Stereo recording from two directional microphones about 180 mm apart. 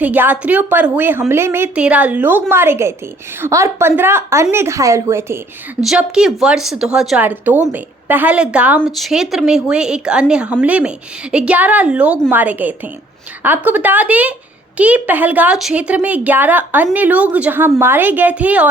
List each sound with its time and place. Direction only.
0.0 s a woman's voice: 10° right (ahead or behind)
5.8 s a woman's voice: 5° right (ahead or behind)